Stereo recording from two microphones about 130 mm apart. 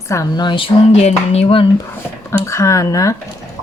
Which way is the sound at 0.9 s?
55° left (ahead or behind).